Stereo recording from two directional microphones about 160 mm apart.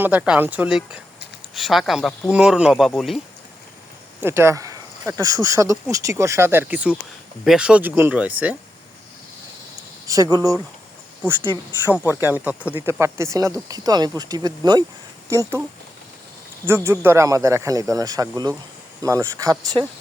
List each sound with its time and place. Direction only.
0.0 s speech: 10° right (ahead or behind)
4.2 s speech: 15° right (ahead or behind)
10.1 s speech: 20° right (ahead or behind)
16.6 s speech: 15° right (ahead or behind)